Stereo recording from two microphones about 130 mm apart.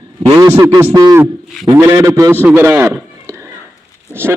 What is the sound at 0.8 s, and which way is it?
A man's voice, 20° right (ahead or behind).